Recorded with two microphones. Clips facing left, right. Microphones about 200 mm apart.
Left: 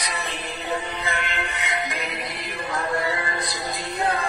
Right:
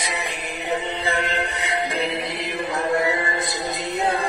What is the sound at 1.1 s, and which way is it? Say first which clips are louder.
Mantra: right 6 dB; 35° right (ahead or behind).